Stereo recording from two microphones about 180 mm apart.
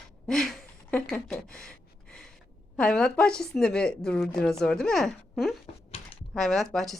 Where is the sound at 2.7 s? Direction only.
5° left (ahead or behind).